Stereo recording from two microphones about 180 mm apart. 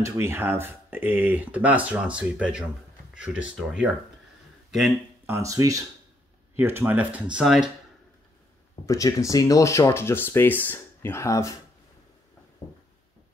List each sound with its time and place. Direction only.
0.0 s speech: 15° right (ahead or behind)
5.3 s speech: 20° right (ahead or behind); by 7.7 s centre (ahead or behind)
8.8 s speech: 15° left (ahead or behind)